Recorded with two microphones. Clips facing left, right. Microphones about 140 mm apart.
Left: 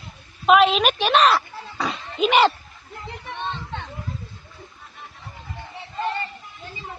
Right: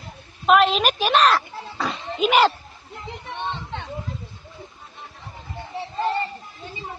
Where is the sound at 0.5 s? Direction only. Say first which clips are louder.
Left 1 dB; centre (ahead or behind).